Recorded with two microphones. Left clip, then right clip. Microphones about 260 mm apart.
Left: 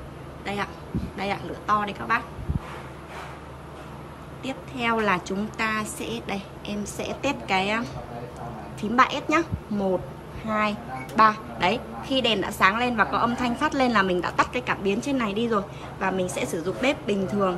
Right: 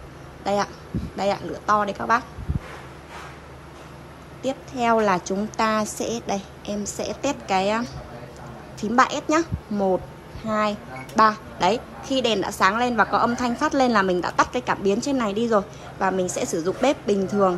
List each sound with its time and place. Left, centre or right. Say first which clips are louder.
0.4 s a sound: right 7 dB; centre
1.1 s a woman's voice: right 6 dB; centre
4.4 s a woman's voice: right 5 dB; centre
8.8 s a woman's voice: right 1 dB; centre